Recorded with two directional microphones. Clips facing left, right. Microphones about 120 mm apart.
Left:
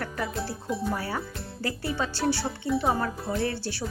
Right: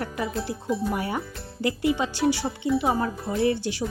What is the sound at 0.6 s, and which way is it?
Speech, centre (ahead or behind).